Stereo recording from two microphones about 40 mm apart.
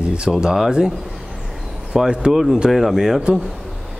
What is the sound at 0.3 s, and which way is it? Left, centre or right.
Speech, centre.